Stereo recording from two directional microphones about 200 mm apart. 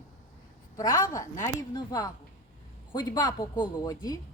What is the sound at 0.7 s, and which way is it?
A woman's voice, 15° left (ahead or behind).